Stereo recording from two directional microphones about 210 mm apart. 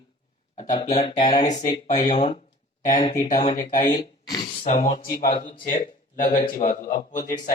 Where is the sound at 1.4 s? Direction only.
35° left (ahead or behind).